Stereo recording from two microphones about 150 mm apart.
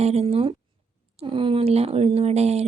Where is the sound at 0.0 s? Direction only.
45° right (ahead or behind).